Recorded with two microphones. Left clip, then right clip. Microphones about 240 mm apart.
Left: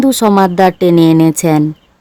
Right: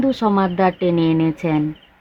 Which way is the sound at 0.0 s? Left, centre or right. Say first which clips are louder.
Left 8 dB; left.